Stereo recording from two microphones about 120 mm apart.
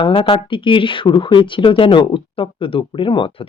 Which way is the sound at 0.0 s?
45° left (ahead or behind).